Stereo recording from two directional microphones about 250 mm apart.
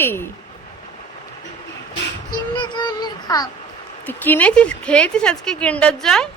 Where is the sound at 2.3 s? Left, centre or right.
Centre.